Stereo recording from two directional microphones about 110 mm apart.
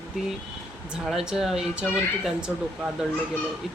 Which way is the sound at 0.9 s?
5° right (ahead or behind).